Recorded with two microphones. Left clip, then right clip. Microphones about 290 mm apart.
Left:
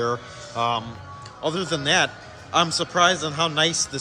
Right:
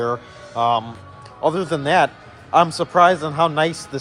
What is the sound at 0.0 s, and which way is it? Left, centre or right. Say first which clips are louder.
A man's voice: right 2 dB; centre.